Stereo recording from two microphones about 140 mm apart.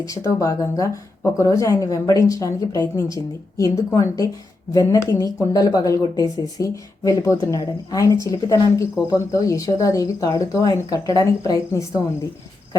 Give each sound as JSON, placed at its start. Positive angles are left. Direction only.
{"t": 0.0, "sound": "speech", "side_deg": 20}